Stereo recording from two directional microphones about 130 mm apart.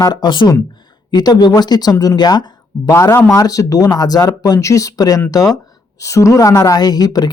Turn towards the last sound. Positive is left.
turn(degrees=30)  # may be behind; listen again after turning